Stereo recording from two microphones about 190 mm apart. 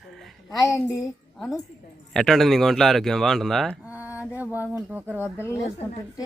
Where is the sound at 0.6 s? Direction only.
15° left (ahead or behind).